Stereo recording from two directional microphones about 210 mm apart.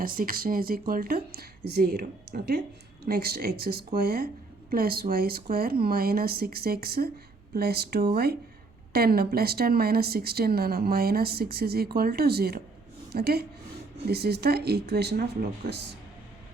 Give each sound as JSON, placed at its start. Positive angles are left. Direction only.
{"t": 0.0, "sound": "speech", "side_deg": -45}